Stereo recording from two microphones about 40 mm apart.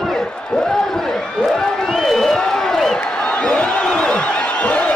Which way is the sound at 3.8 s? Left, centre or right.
Left.